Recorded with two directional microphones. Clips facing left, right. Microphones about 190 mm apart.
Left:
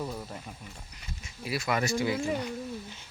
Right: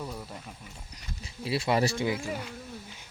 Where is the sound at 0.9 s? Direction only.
30° right (ahead or behind).